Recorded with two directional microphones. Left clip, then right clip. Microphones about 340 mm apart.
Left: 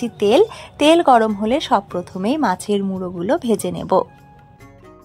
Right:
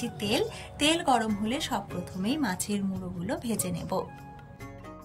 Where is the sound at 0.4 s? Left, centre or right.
Centre.